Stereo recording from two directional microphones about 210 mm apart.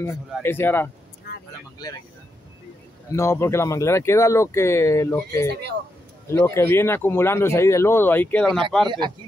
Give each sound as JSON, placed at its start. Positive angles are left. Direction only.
{"t": 0.0, "sound": "speech", "side_deg": 10}
{"t": 3.2, "sound": "speech", "side_deg": 10}
{"t": 5.5, "sound": "speech", "side_deg": -50}
{"t": 6.2, "sound": "speech", "side_deg": 15}
{"t": 8.8, "sound": "speech", "side_deg": -20}